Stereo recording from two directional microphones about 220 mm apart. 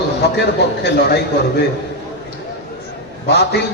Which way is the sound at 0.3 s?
50° left (ahead or behind).